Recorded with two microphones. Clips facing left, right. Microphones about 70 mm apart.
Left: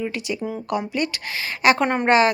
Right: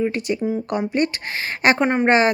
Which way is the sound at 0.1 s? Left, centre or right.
Right.